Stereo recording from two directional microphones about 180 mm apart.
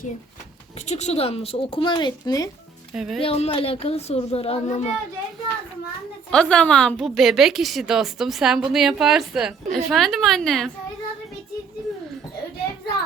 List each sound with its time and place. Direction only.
0.8 s a woman's voice: 40° left (ahead or behind); by 2.5 s 20° left (ahead or behind)
2.9 s speech: centre (ahead or behind)
3.2 s a woman's voice: 35° left (ahead or behind)
6.3 s a woman's voice: 5° left (ahead or behind)